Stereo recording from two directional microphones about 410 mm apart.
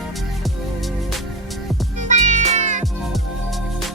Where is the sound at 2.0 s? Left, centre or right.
Centre.